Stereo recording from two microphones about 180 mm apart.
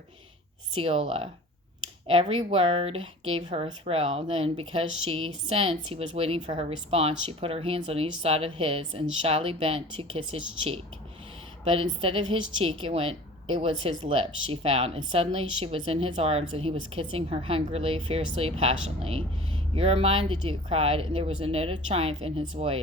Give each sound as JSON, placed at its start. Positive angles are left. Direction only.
{"t": 0.8, "sound": "a woman's voice", "side_deg": -35}